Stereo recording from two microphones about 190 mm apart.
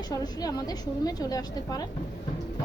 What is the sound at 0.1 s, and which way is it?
Speech, 20° left (ahead or behind).